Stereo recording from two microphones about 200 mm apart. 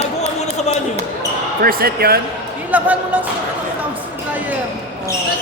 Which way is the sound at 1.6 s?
45° right (ahead or behind).